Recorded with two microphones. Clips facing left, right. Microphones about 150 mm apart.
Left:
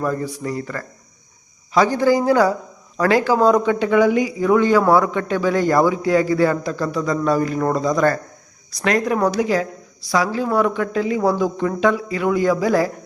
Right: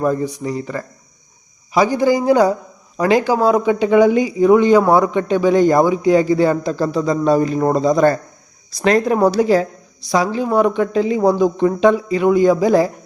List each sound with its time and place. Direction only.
0.0 s a man's voice: 20° right (ahead or behind)
10.1 s speech: 20° right (ahead or behind)